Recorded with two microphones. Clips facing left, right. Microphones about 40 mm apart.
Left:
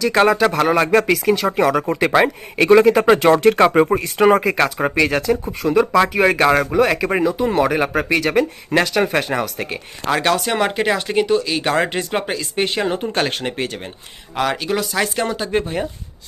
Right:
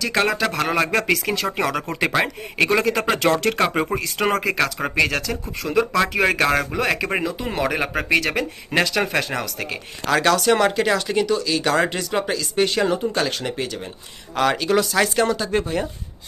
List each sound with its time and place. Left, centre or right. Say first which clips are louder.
0.0 s speech: left 6 dB; centre
2.6 s speech: left 10 dB; left
13.0 s speech: left 2 dB; left
14.3 s speech: right 1 dB; centre
15.4 s speech: left 1 dB; left